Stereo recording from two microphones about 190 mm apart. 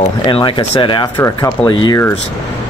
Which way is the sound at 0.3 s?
25° left (ahead or behind).